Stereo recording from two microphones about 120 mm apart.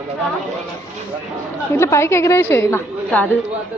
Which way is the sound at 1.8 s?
25° left (ahead or behind).